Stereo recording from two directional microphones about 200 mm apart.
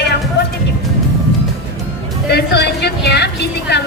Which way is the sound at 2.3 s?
55° left (ahead or behind).